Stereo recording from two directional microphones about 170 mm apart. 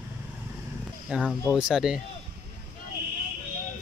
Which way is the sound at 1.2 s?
5° left (ahead or behind).